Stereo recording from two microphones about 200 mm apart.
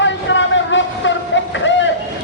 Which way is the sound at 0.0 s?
65° left (ahead or behind).